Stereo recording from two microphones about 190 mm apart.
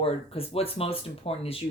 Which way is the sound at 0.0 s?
30° left (ahead or behind).